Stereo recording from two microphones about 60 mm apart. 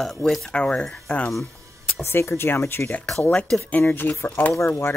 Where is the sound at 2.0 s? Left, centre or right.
Left.